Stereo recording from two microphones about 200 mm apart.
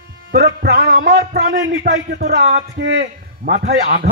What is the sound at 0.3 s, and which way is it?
Speech, 50° right (ahead or behind).